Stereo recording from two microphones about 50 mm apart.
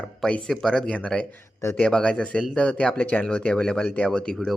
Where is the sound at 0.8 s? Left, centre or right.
Left.